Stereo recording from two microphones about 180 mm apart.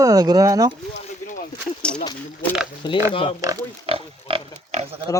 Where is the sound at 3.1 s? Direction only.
30° left (ahead or behind).